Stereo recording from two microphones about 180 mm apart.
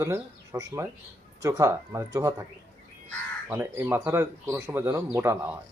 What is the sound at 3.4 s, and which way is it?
Speech, 15° right (ahead or behind).